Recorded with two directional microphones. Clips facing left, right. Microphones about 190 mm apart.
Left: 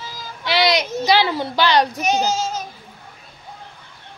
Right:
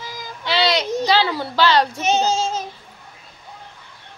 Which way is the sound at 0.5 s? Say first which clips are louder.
Left 1 dB; 15° left (ahead or behind).